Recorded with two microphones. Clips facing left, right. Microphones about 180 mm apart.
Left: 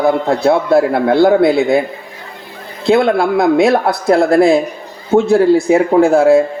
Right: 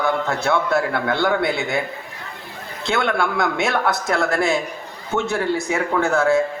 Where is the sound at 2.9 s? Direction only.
35° left (ahead or behind).